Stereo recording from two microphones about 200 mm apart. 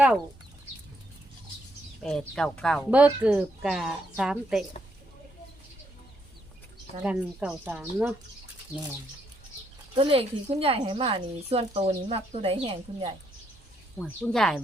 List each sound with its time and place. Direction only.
2.0 s speech: 5° left (ahead or behind)
7.0 s speech: 5° right (ahead or behind)
9.9 s speech: 25° right (ahead or behind)
14.0 s speech: centre (ahead or behind)